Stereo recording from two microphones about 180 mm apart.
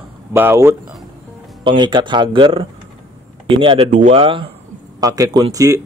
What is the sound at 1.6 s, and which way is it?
Speech, 25° right (ahead or behind).